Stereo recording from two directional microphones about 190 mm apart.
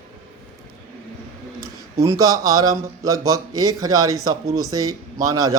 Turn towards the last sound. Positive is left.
turn(degrees=-20)  # may be behind; listen again after turning